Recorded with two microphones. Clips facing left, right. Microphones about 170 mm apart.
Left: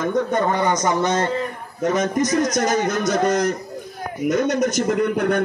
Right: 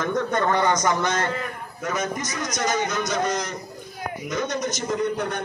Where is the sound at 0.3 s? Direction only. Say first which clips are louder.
Left 2 dB; 20° left (ahead or behind).